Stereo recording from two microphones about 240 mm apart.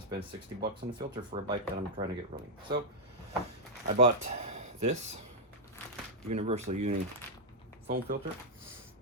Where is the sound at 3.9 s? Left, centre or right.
Right.